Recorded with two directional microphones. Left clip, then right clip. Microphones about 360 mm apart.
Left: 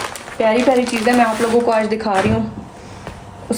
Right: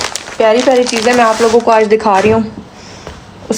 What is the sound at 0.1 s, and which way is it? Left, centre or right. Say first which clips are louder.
Speech: right 6 dB; right.